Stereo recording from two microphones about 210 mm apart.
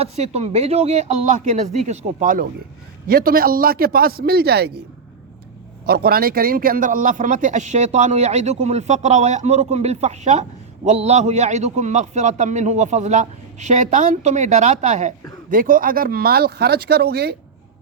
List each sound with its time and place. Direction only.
0.0 s a man's voice: 30° right (ahead or behind); by 4.7 s 50° right (ahead or behind)
5.8 s a man's voice: 45° right (ahead or behind)